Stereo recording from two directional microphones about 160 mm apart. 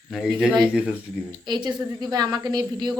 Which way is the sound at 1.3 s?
25° right (ahead or behind).